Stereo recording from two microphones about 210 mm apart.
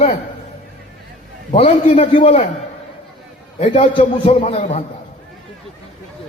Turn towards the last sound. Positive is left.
turn(degrees=30)  # may be behind; listen again after turning